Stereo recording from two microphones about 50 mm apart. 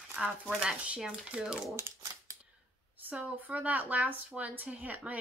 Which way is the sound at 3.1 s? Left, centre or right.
Right.